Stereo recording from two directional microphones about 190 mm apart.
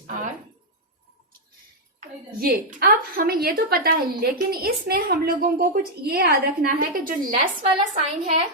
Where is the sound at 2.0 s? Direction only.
50° right (ahead or behind).